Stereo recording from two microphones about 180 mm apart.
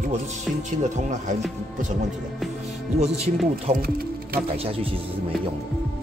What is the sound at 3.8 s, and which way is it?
Music, 55° right (ahead or behind).